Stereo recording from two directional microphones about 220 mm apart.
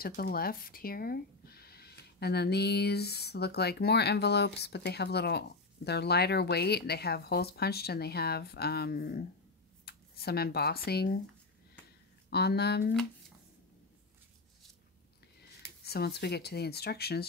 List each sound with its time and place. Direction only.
0.0 s speech: 40° left (ahead or behind)
12.3 s speech: 45° left (ahead or behind)
15.8 s speech: 45° left (ahead or behind)